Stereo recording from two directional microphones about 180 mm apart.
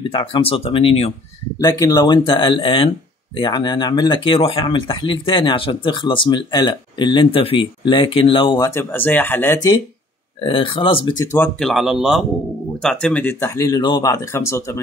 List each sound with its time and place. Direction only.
0.0 s speech: 30° left (ahead or behind)
1.6 s speech: 20° left (ahead or behind)
8.6 s speech: 10° left (ahead or behind)
10.4 s speech: 30° left (ahead or behind)
11.3 s speech: 5° left (ahead or behind)